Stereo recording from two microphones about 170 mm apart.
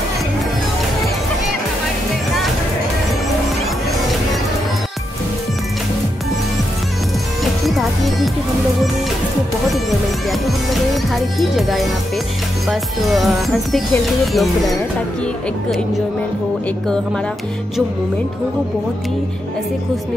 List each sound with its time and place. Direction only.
7.6 s music: centre (ahead or behind)
10.7 s music: centre (ahead or behind)
12.6 s speech: centre (ahead or behind)